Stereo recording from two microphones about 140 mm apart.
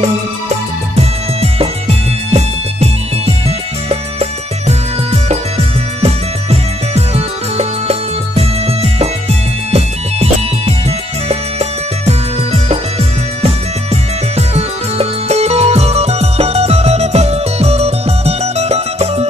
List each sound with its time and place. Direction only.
0.9 s music: 45° right (ahead or behind)
14.3 s music: 50° right (ahead or behind)